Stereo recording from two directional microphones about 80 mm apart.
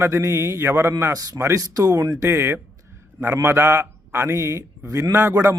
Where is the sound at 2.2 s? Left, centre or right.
Right.